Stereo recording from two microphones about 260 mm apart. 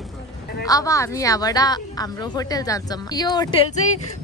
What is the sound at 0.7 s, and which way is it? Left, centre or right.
A woman's voice, centre.